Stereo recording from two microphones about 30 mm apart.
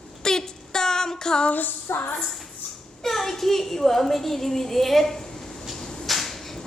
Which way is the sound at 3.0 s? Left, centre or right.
Centre.